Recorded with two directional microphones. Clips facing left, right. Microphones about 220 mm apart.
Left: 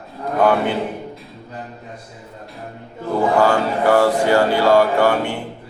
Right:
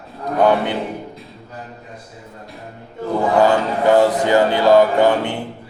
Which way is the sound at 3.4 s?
20° right (ahead or behind).